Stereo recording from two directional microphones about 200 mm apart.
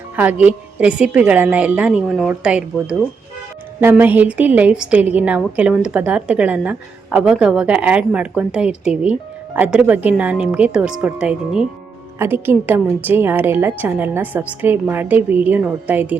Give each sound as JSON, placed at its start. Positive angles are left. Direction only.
{"t": 0.2, "sound": "a woman's voice", "side_deg": -5}